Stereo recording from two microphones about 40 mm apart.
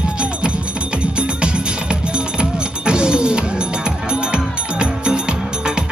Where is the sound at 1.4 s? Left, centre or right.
Right.